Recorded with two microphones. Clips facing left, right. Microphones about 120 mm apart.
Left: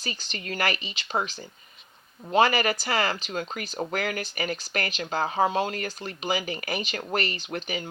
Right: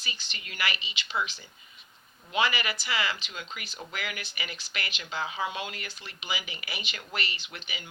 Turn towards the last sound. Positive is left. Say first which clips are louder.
# left 11 dB
turn(degrees=45)  # may be behind; listen again after turning